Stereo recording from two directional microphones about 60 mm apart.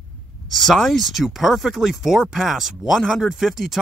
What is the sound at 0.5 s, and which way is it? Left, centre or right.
Speech, centre.